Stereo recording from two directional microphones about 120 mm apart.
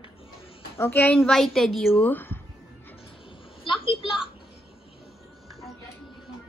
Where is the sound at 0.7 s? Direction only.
20° left (ahead or behind).